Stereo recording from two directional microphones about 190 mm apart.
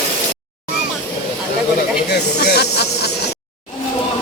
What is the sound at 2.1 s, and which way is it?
Snake, 60° left (ahead or behind).